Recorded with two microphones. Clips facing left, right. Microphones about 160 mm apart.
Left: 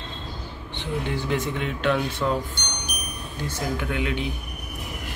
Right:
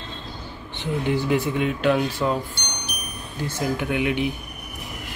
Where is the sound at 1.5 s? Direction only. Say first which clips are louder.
Right 4 dB; 10° right (ahead or behind).